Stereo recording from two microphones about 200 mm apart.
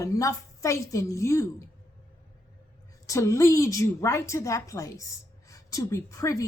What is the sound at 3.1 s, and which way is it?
A woman's voice, 15° left (ahead or behind).